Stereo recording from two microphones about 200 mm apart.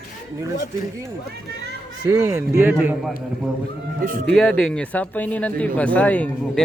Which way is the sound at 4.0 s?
45° right (ahead or behind).